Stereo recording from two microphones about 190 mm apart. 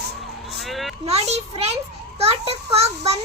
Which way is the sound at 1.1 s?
35° right (ahead or behind).